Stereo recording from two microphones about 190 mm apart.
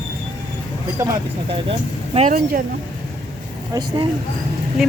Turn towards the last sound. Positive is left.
turn(degrees=0)  # may be behind; listen again after turning